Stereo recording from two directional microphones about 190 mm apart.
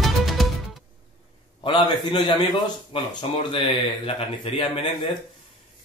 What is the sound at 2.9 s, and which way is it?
Speech, 25° left (ahead or behind).